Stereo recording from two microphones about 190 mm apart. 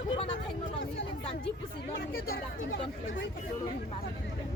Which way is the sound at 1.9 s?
55° left (ahead or behind).